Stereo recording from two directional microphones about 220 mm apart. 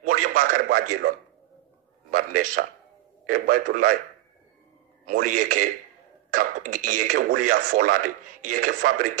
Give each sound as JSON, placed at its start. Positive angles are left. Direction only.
{"t": 0.0, "sound": "a man's voice", "side_deg": -35}
{"t": 5.0, "sound": "speech", "side_deg": -40}